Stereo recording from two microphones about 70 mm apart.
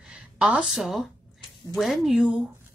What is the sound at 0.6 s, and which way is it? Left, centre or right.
Speech, centre.